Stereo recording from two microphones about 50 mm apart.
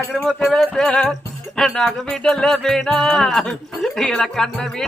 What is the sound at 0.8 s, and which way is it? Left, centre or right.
Music, centre.